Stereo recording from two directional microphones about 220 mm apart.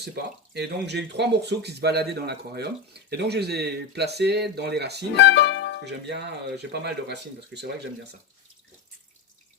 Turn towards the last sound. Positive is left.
turn(degrees=-50)  # may be behind; listen again after turning